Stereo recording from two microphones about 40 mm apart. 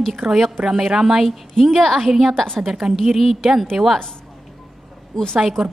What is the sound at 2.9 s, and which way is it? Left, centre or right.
Speech, centre.